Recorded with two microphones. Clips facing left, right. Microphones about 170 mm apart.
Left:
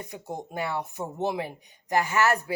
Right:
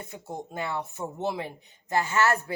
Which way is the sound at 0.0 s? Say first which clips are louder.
Left 1 dB; 15° left (ahead or behind).